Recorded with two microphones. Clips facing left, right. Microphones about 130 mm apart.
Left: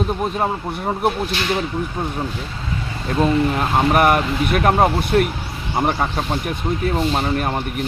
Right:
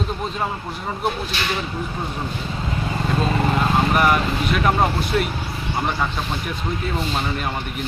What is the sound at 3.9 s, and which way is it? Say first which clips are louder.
Speech: left 3 dB; 55° left (ahead or behind).